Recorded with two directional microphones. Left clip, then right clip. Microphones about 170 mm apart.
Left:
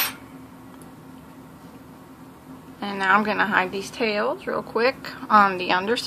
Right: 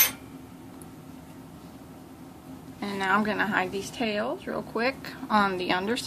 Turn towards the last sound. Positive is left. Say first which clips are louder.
# left 5 dB
turn(degrees=5)  # may be behind; listen again after turning